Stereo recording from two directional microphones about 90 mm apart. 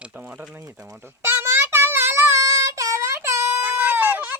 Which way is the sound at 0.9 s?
25° right (ahead or behind).